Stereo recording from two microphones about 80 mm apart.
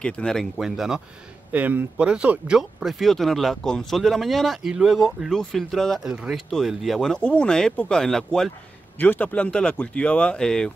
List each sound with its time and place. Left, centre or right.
0.0 s speech: centre
0.6 s speech: centre
1.5 s speech: right; by 6.0 s centre
6.0 s speech: centre
8.9 s speech: left